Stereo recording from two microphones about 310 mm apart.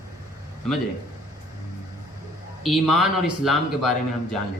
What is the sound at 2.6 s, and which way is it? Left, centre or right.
Speech, centre.